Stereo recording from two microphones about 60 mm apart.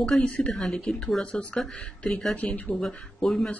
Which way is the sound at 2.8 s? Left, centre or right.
Centre.